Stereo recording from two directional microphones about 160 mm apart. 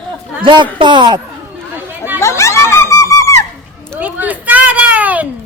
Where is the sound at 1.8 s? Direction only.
15° right (ahead or behind).